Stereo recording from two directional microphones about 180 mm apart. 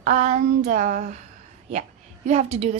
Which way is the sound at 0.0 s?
40° right (ahead or behind).